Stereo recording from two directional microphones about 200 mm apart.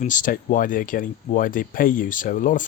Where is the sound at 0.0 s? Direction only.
40° left (ahead or behind).